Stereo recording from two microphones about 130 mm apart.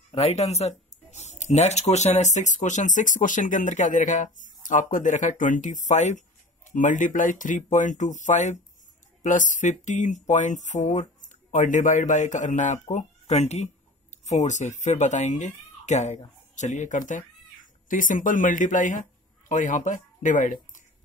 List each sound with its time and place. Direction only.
0.1 s speech: 55° left (ahead or behind)
6.7 s speech: 80° left
17.8 s speech: 90° left; by 20.5 s 75° left (ahead or behind)